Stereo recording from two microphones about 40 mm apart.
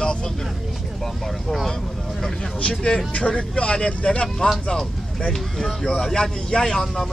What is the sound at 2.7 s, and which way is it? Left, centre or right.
Speech, centre.